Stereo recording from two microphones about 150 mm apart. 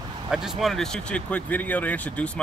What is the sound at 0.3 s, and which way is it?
Speech, centre (ahead or behind).